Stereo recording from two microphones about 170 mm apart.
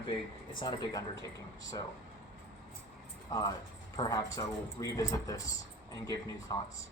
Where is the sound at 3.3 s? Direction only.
20° left (ahead or behind).